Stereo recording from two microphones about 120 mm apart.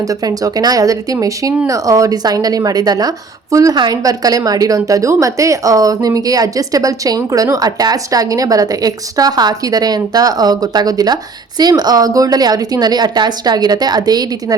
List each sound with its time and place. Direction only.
0.1 s speech: 30° right (ahead or behind)